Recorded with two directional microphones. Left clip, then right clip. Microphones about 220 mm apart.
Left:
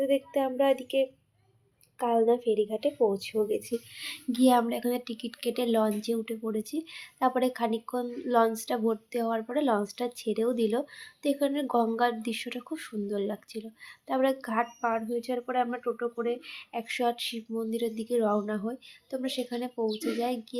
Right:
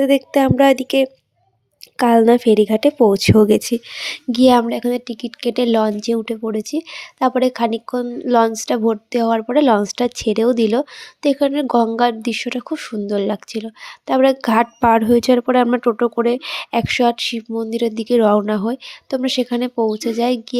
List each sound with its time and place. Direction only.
0.0 s a woman's voice: 50° right (ahead or behind)